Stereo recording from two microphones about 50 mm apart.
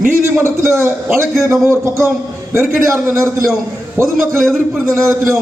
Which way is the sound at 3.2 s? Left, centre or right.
Right.